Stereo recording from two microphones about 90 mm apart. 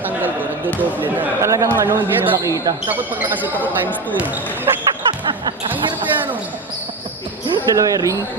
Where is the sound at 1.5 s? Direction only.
35° right (ahead or behind).